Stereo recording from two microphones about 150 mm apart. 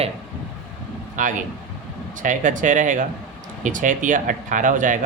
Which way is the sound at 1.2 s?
60° right (ahead or behind).